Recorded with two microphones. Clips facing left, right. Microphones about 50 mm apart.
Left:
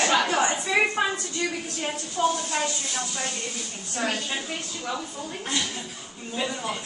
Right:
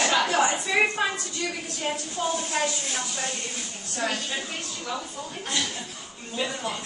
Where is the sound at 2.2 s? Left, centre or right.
Left.